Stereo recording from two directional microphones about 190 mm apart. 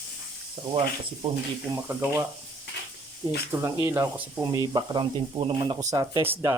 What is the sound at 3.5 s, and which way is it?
Speech, 15° right (ahead or behind).